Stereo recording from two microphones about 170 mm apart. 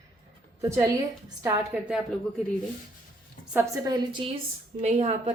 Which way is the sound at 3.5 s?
15° right (ahead or behind).